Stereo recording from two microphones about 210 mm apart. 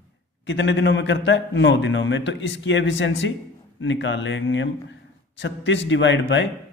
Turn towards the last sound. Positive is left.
turn(degrees=60)  # may be behind; listen again after turning